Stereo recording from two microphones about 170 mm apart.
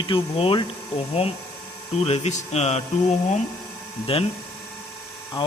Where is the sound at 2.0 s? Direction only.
40° left (ahead or behind).